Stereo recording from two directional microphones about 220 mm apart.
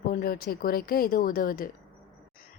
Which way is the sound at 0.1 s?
40° left (ahead or behind).